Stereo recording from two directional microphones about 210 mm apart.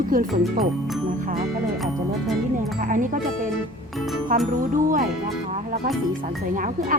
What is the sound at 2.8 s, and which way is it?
Speech, 40° right (ahead or behind).